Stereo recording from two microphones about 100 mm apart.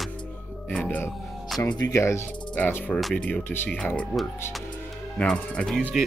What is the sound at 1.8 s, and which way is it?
Speech, 30° left (ahead or behind).